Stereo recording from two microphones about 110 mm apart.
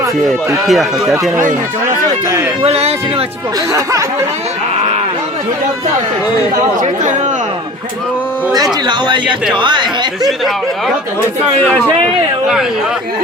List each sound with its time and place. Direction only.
0.7 s speech: centre (ahead or behind)
2.6 s speech: 70° right (ahead or behind)
3.7 s speech: 30° right (ahead or behind)
8.5 s speech: 40° right (ahead or behind)